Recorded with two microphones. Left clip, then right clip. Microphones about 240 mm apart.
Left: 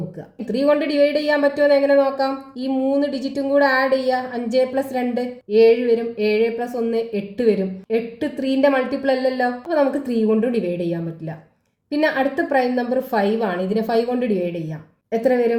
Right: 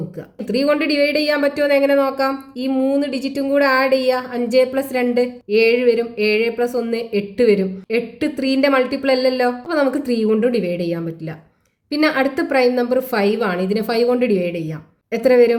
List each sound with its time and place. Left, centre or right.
0.4 s a woman's voice: right